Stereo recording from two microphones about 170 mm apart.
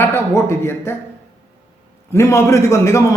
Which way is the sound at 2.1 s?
15° left (ahead or behind).